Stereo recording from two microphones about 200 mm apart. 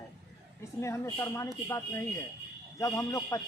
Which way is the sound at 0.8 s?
15° left (ahead or behind).